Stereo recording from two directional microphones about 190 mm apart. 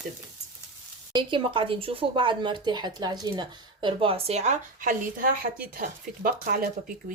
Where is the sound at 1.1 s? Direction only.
25° right (ahead or behind).